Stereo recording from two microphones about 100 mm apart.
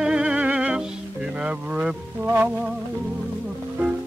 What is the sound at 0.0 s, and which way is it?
Music, 10° right (ahead or behind).